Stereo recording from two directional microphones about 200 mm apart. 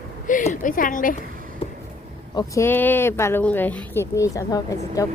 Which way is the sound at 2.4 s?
15° left (ahead or behind).